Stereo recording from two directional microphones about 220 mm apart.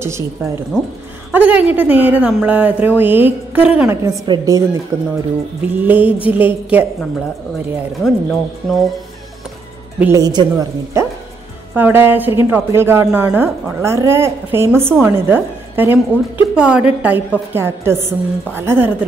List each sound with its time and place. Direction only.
0.0 s a woman's voice: 10° right (ahead or behind)
9.9 s a woman's voice: 10° right (ahead or behind)